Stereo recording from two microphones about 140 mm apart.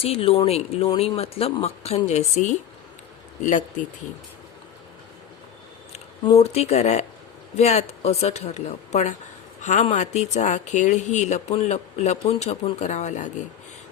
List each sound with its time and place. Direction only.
0.0 s speech: 45° left (ahead or behind)
6.2 s speech: 45° left (ahead or behind)